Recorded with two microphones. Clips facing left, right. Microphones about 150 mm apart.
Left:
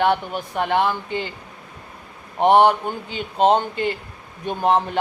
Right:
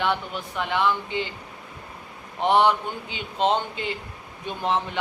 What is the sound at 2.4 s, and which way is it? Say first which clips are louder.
A man's voice: left 5 dB; 50° left (ahead or behind).